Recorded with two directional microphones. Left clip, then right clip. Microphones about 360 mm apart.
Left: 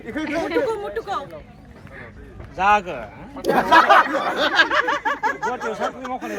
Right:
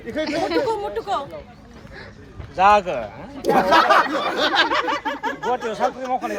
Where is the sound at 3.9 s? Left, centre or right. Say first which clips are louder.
Left 2 dB; centre.